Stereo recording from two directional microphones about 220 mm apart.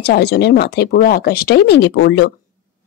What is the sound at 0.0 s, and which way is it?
Speech, 45° left (ahead or behind).